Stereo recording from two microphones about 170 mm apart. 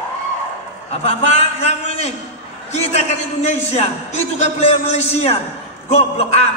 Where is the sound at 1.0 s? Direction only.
40° left (ahead or behind).